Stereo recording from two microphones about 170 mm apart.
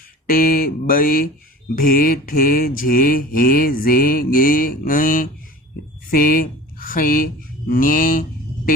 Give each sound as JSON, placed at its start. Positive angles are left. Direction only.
{"t": 0.3, "sound": "mantra", "side_deg": 60}
{"t": 6.1, "sound": "speech", "side_deg": 55}
{"t": 7.7, "sound": "mantra", "side_deg": 55}